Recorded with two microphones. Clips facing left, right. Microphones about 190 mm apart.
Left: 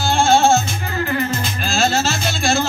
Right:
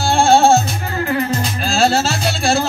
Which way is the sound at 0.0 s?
35° right (ahead or behind).